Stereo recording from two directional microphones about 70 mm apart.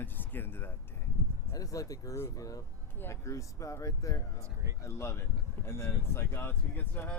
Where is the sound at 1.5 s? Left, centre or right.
Left.